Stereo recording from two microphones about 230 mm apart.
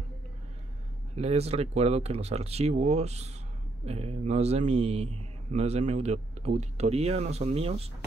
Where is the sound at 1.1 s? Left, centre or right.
Right.